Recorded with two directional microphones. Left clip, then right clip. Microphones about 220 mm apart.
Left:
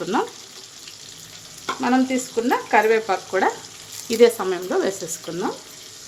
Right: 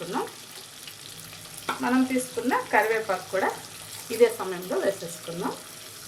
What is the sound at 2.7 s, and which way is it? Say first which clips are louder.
Speech: left 6 dB; 50° left (ahead or behind).